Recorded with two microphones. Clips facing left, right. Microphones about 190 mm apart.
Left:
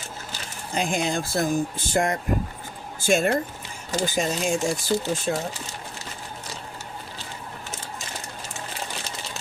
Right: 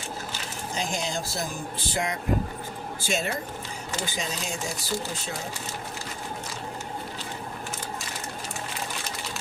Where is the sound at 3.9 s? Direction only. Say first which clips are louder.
Left 8 dB; 40° left (ahead or behind).